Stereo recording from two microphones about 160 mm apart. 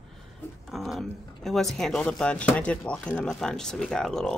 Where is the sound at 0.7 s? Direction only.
Centre (ahead or behind).